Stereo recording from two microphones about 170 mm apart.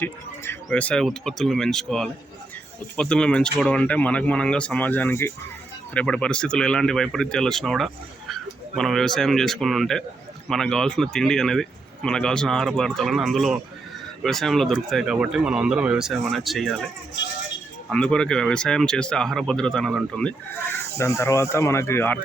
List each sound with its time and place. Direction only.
0.0 s speech: 10° left (ahead or behind)
17.9 s speech: 5° left (ahead or behind)
21.0 s speech: 15° left (ahead or behind)